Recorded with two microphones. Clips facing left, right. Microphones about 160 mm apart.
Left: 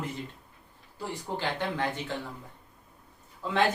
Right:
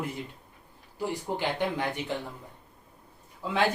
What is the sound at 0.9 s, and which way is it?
Speech, 15° right (ahead or behind).